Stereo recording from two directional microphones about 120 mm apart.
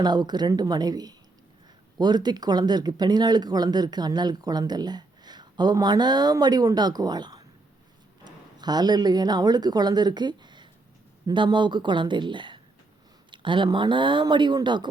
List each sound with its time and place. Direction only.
0.0 s speech: 35° right (ahead or behind)